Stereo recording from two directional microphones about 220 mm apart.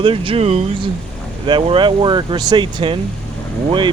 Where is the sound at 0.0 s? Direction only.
25° right (ahead or behind).